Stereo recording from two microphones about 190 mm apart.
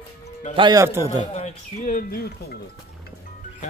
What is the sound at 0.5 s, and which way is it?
Speech, 20° right (ahead or behind).